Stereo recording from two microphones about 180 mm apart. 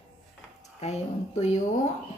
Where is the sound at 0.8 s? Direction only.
40° left (ahead or behind).